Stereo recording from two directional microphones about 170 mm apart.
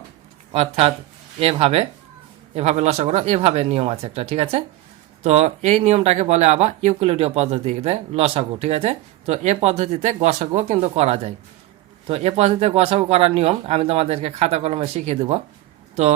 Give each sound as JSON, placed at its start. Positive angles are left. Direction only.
{"t": 0.5, "sound": "speech", "side_deg": -35}